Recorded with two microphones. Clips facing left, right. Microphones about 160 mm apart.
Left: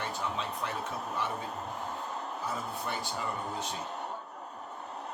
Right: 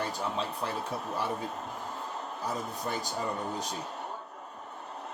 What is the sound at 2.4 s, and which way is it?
Speech, 40° right (ahead or behind).